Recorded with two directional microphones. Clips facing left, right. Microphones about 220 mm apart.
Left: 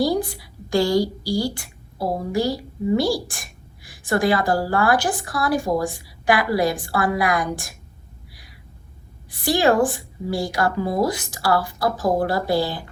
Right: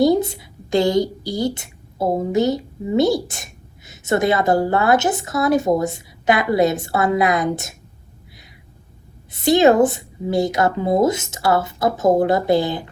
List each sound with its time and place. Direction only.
0.0 s a woman's voice: 25° right (ahead or behind)
9.3 s a woman's voice: 20° right (ahead or behind)